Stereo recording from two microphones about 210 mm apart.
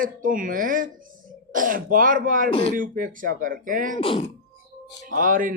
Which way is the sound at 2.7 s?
40° right (ahead or behind).